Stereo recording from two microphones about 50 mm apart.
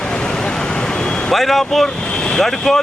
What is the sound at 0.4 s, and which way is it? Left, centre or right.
Vehicle, centre.